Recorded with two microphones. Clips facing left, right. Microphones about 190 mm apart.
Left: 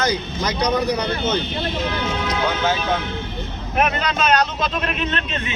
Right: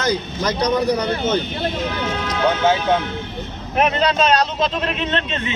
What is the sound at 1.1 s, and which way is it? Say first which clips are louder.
Speech: right 2 dB; 45° right (ahead or behind).